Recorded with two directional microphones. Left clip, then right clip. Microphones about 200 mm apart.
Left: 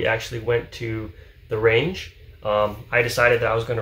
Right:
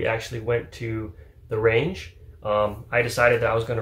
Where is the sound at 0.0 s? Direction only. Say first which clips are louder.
Left 3 dB; centre (ahead or behind).